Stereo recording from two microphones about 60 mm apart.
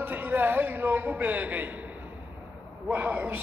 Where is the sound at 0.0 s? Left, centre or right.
Right.